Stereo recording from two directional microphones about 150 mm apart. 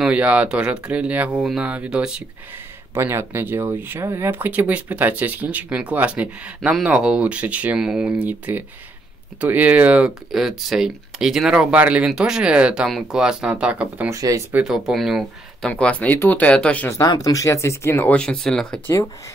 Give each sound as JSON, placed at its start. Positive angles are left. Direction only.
{"t": 0.0, "sound": "speech", "side_deg": -10}
{"t": 2.9, "sound": "speech", "side_deg": -15}
{"t": 14.1, "sound": "speech", "side_deg": -20}
{"t": 14.5, "sound": "speech", "side_deg": -5}
{"t": 17.0, "sound": "speech", "side_deg": 25}